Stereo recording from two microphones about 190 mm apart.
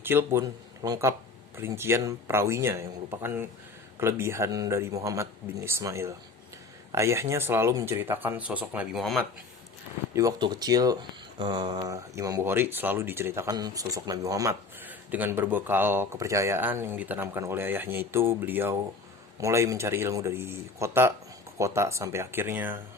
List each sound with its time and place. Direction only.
0.0 s speech: 10° right (ahead or behind)
10.2 s speech: 20° right (ahead or behind)